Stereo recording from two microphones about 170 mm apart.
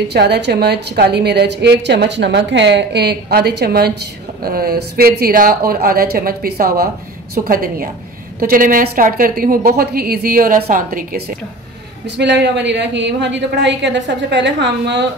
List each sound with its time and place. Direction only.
0.1 s a woman's voice: 80° right; by 11.3 s 60° right (ahead or behind)
12.2 s a woman's voice: 90° right